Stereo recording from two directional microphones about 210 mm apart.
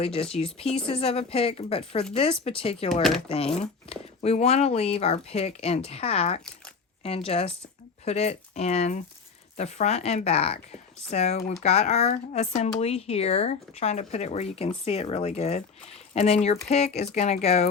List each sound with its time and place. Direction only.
0.0 s speech: 30° left (ahead or behind)